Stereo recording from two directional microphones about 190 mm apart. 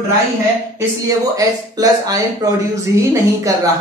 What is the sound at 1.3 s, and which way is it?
A woman's voice, 20° right (ahead or behind).